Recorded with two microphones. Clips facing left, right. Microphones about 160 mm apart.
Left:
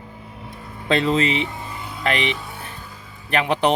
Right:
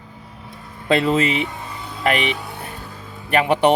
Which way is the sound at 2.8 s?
65° right (ahead or behind).